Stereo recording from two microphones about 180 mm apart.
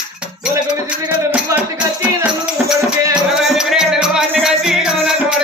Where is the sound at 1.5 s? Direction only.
15° right (ahead or behind).